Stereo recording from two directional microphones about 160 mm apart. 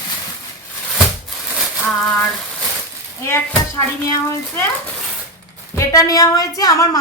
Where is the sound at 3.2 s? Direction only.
15° left (ahead or behind).